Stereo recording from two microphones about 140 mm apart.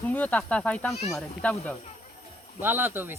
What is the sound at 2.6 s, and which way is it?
Speech, 15° right (ahead or behind).